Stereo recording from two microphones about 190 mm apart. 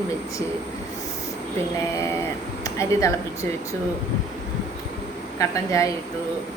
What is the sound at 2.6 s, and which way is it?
A woman's voice, 15° left (ahead or behind).